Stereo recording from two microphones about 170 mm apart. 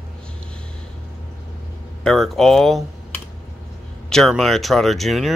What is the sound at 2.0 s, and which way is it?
Speech, centre (ahead or behind).